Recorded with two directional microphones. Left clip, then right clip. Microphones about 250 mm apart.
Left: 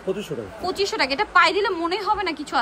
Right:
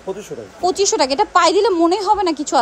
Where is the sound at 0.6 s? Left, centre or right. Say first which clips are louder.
Right 7 dB; centre.